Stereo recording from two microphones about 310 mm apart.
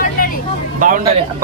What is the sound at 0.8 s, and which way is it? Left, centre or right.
Speech, right.